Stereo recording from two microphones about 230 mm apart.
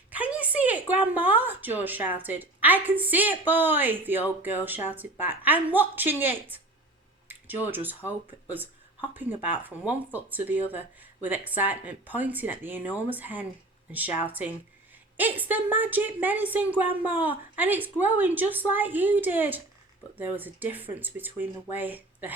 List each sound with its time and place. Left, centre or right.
0.1 s a woman's voice: centre
9.1 s a woman's voice: centre